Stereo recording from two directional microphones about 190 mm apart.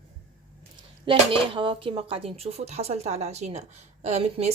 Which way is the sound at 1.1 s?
25° right (ahead or behind).